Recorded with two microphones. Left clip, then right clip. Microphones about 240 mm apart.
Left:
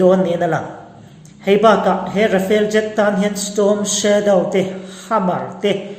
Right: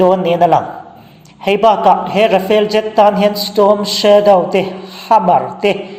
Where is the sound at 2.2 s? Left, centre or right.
Right.